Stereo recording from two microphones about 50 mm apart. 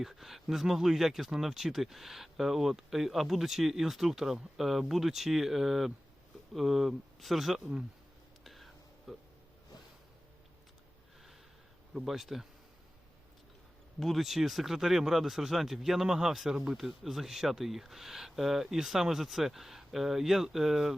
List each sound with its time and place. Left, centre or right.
0.0 s speech: centre
8.4 s whispering: centre
12.0 s speech: centre
14.0 s speech: centre